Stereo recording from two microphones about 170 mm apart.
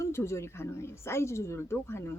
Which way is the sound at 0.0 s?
15° left (ahead or behind).